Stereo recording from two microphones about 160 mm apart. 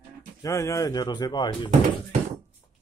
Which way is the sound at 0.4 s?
20° left (ahead or behind).